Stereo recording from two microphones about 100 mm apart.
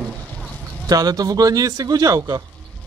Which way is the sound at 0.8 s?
40° right (ahead or behind).